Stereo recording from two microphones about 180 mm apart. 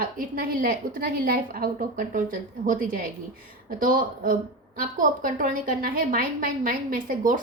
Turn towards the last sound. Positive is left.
turn(degrees=-50)  # may be behind; listen again after turning